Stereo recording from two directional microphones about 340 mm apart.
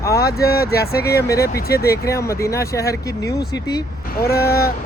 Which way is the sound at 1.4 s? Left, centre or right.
Left.